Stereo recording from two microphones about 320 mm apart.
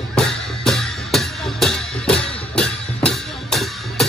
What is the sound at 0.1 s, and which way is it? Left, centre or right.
Music, centre.